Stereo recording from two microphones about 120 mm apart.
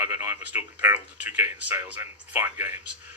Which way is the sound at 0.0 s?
15° right (ahead or behind).